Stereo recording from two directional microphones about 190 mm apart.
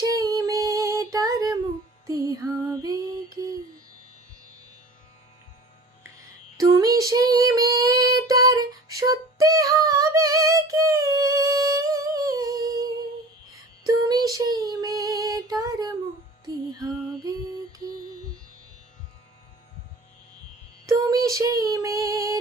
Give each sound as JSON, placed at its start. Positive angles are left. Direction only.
{"t": 0.0, "sound": "female singing", "side_deg": -20}
{"t": 2.0, "sound": "music", "side_deg": -20}
{"t": 2.8, "sound": "female singing", "side_deg": -20}
{"t": 6.0, "sound": "female singing", "side_deg": -20}
{"t": 13.8, "sound": "child singing", "side_deg": -20}
{"t": 16.4, "sound": "female singing", "side_deg": -20}
{"t": 20.8, "sound": "child singing", "side_deg": -20}